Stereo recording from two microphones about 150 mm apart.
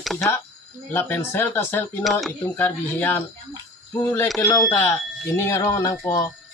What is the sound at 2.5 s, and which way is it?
Speech, 15° left (ahead or behind).